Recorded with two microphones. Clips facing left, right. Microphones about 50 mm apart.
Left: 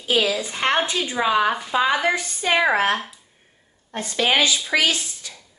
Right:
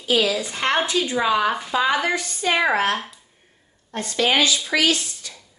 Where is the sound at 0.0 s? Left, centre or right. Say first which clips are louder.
Right 1 dB; left.